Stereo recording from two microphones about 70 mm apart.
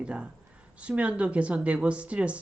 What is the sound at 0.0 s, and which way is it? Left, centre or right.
A woman's voice, centre.